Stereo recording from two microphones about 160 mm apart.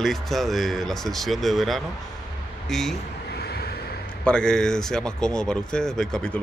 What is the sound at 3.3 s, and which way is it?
Vehicle, 80° left.